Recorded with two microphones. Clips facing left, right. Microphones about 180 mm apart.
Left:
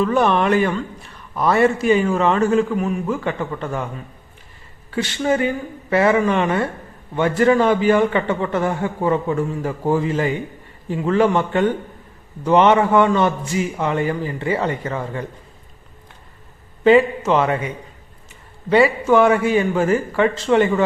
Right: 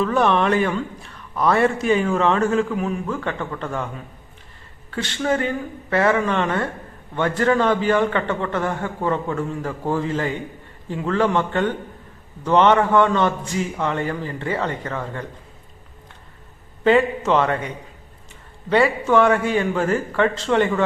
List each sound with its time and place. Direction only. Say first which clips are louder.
0.0 s a man's voice: left 1 dB; centre (ahead or behind)
16.8 s a man's voice: left 3 dB; centre (ahead or behind)
18.7 s a man's voice: left 3 dB; 5° left (ahead or behind)